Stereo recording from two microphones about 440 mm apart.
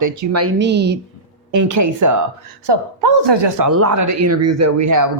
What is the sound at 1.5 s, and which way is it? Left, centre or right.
Speech, right.